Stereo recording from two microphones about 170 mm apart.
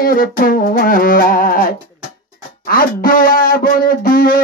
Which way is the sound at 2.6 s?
60° left (ahead or behind).